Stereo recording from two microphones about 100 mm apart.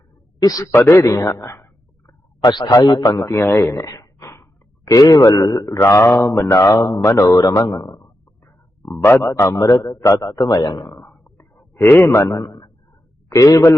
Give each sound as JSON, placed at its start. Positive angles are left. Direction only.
{"t": 0.4, "sound": "speech", "side_deg": 35}
{"t": 0.7, "sound": "a man's voice", "side_deg": 25}
{"t": 2.4, "sound": "a man's voice", "side_deg": 50}
{"t": 5.7, "sound": "a man's voice", "side_deg": 25}
{"t": 10.8, "sound": "a sound", "side_deg": 20}
{"t": 13.3, "sound": "speech", "side_deg": 35}